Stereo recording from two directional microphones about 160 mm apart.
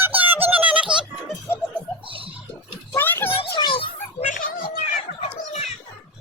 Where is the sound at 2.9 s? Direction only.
15° left (ahead or behind).